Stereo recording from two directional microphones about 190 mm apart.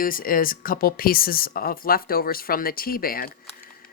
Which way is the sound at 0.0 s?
50° left (ahead or behind).